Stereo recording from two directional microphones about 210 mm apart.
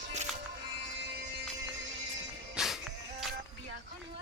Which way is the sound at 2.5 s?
Centre (ahead or behind).